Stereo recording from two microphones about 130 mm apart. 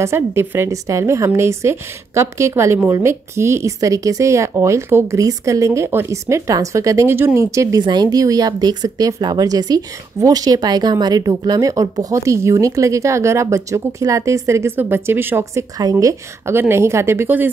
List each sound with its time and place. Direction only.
0.0 s speech: 20° right (ahead or behind)